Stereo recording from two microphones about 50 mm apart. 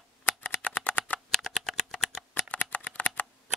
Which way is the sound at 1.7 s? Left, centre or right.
Centre.